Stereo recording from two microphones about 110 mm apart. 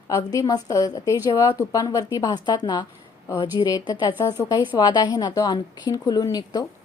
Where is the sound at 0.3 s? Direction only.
35° left (ahead or behind).